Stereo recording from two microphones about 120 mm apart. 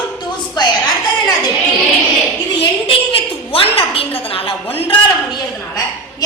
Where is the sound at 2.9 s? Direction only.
50° left (ahead or behind).